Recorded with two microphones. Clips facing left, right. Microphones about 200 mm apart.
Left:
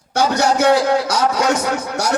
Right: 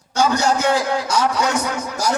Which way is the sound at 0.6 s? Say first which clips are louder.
Left 5 dB; 70° left (ahead or behind).